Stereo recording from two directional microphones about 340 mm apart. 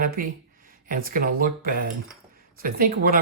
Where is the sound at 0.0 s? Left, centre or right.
Right.